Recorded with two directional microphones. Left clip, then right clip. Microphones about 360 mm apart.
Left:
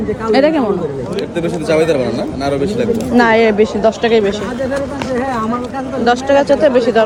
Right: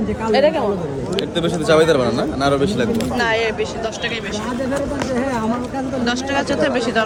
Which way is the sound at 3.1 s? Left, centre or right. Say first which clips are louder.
Left 10 dB; centre.